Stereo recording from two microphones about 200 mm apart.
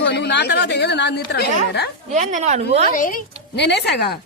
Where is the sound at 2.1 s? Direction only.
35° right (ahead or behind).